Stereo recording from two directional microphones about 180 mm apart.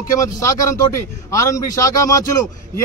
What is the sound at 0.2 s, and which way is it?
A man's voice, 20° left (ahead or behind).